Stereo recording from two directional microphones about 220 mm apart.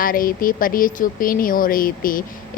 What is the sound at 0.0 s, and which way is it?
A woman's voice, 40° left (ahead or behind).